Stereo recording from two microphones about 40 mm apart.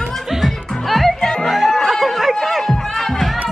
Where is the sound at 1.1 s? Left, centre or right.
Centre.